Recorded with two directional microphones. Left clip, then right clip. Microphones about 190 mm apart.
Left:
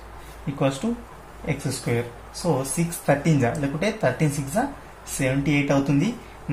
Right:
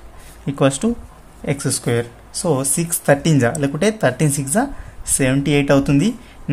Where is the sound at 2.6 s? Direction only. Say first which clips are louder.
Right 5 dB; 50° right (ahead or behind).